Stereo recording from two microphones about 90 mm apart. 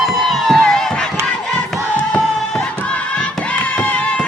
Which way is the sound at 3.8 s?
15° left (ahead or behind).